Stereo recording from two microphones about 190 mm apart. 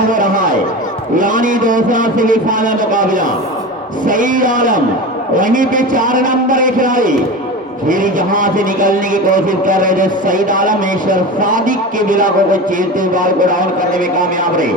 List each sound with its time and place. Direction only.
0.1 s a man's voice: 45° right (ahead or behind)